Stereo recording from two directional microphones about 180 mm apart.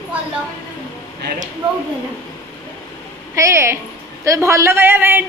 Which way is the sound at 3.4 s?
15° right (ahead or behind).